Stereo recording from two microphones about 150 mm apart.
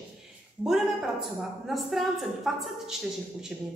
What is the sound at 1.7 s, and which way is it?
Speech, centre (ahead or behind).